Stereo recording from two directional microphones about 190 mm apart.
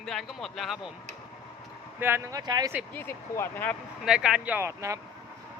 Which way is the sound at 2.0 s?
10° right (ahead or behind).